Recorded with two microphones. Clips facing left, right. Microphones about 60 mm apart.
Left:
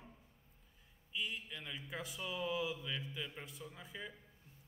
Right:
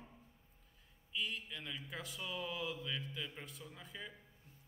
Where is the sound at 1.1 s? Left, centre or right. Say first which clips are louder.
Right 1 dB; centre.